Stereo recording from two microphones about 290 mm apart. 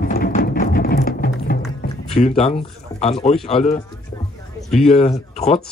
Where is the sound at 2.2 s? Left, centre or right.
Left.